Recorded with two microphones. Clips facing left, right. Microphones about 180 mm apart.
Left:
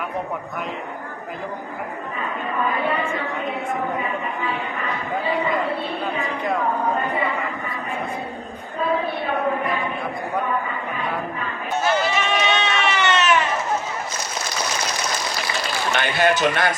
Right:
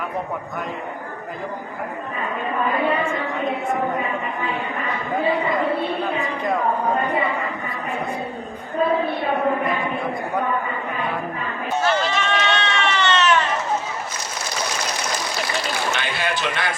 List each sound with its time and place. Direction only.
11.8 s run: 10° left (ahead or behind)
15.9 s speech: 50° left (ahead or behind)